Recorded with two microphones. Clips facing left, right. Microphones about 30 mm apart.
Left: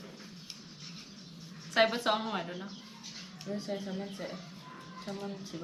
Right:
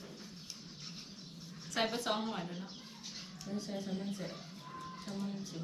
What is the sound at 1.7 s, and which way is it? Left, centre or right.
Speech, left.